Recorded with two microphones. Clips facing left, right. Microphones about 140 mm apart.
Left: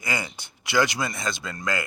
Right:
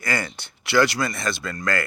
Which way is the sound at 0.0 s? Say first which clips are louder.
Right 3 dB; 15° left (ahead or behind).